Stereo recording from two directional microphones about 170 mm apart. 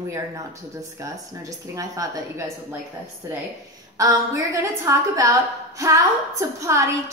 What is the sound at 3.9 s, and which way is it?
A woman's voice, 20° right (ahead or behind).